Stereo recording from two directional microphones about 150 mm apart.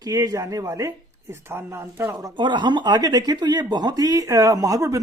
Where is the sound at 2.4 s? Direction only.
30° right (ahead or behind).